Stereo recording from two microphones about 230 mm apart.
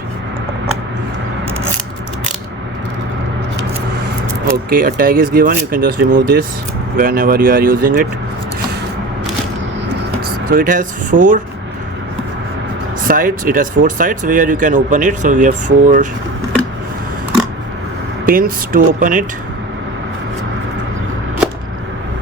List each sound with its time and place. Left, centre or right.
4.7 s speech: right
10.5 s speech: right
13.1 s speech: right
18.3 s speech: right